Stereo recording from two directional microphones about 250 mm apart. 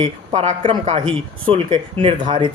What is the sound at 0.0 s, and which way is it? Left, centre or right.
Speech, right.